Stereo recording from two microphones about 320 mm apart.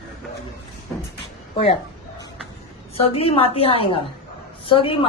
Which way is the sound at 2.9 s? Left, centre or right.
Centre.